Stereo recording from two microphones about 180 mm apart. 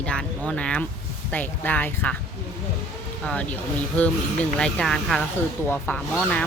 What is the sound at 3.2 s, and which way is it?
Speech, 10° left (ahead or behind).